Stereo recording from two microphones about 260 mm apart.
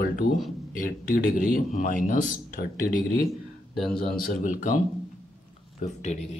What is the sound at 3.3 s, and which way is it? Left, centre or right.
Speech, centre.